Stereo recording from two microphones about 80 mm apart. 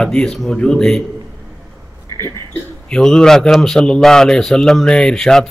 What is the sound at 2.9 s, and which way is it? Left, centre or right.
A man's voice, centre.